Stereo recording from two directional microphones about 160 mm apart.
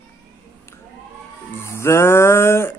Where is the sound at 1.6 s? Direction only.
15° left (ahead or behind).